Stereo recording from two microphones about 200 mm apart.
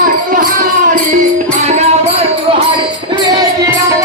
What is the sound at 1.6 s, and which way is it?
Music, 35° right (ahead or behind).